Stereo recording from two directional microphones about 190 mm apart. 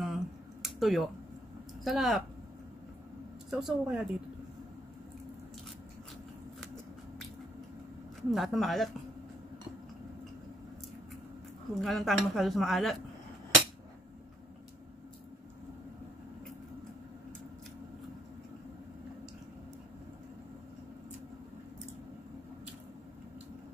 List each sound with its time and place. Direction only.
0.0 s a sound: centre (ahead or behind)
1.9 s speech: centre (ahead or behind)
3.4 s speech: 5° right (ahead or behind)
8.2 s speech: centre (ahead or behind)
11.8 s speech: centre (ahead or behind)